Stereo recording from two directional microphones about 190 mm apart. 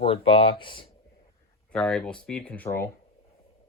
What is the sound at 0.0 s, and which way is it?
Speech, 30° left (ahead or behind).